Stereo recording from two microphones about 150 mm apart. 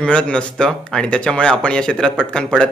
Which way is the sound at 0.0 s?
5° left (ahead or behind).